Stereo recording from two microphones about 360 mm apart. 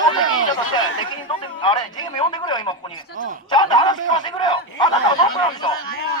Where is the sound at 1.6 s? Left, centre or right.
Centre.